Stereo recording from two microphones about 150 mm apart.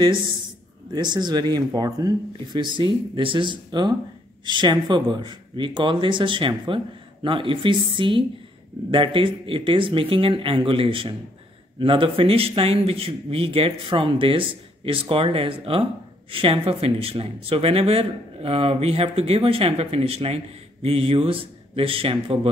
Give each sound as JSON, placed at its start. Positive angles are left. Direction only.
{"t": 0.9, "sound": "speech", "side_deg": -30}